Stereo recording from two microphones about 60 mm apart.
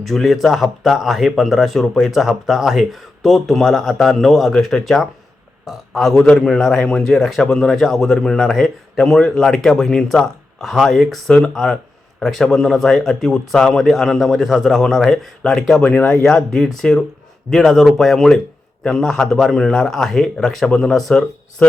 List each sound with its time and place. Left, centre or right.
0.0 s a man's voice: centre
15.8 s speech: left
16.2 s a man's voice: centre